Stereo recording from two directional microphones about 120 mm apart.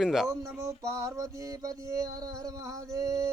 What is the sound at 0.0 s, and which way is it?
Speech, 5° right (ahead or behind).